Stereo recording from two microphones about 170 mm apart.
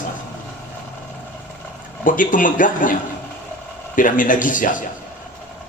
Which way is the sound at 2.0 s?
50° left (ahead or behind).